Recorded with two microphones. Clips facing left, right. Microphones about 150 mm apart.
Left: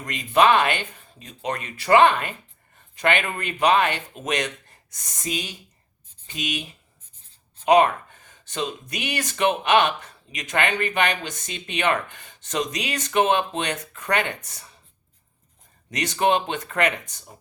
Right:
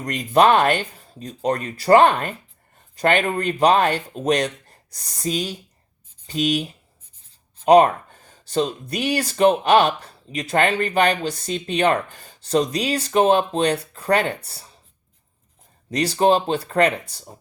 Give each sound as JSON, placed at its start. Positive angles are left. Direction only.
{"t": 0.0, "sound": "speech", "side_deg": -40}
{"t": 15.9, "sound": "speech", "side_deg": -35}